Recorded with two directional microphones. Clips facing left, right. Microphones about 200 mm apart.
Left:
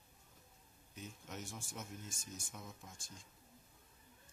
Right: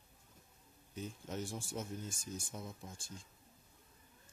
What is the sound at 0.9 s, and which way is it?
Speech, 30° right (ahead or behind).